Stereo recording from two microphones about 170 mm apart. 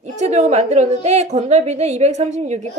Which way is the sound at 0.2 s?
40° right (ahead or behind).